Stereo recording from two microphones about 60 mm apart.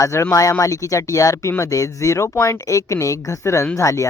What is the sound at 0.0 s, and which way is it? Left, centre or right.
Speech, left.